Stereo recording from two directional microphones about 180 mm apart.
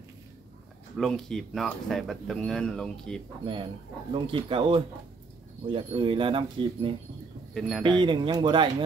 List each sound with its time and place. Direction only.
0.9 s speech: centre (ahead or behind)
4.1 s speech: 30° right (ahead or behind)
7.5 s speech: centre (ahead or behind)
8.0 s speech: 25° right (ahead or behind)